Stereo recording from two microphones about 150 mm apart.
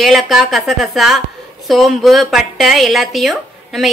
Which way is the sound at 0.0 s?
Centre (ahead or behind).